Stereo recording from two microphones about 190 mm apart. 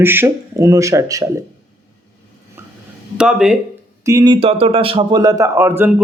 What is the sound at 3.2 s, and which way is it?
Speech, 5° right (ahead or behind).